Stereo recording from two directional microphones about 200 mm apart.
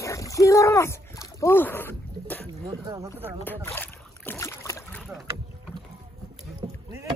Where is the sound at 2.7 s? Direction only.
15° right (ahead or behind).